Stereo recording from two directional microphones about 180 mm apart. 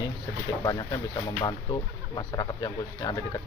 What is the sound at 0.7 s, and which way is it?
Speech, 20° left (ahead or behind).